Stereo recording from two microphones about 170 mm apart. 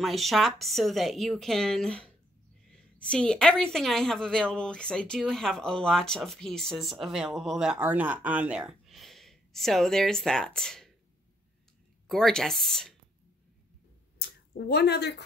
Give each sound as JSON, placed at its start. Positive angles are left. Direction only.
{"t": 0.0, "sound": "a woman's voice", "side_deg": 0}
{"t": 12.1, "sound": "a woman's voice", "side_deg": 5}
{"t": 14.7, "sound": "a woman's voice", "side_deg": 75}